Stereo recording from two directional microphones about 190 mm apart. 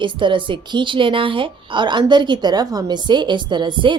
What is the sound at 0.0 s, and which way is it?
A woman's voice, 25° right (ahead or behind).